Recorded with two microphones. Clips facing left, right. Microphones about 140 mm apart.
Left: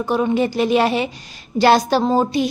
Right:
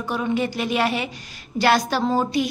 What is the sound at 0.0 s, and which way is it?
A woman's voice, 30° left (ahead or behind).